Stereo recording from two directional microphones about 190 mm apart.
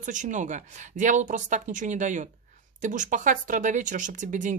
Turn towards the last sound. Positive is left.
turn(degrees=-40)  # may be behind; listen again after turning